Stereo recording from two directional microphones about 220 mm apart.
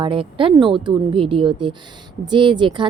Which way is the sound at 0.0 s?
25° right (ahead or behind).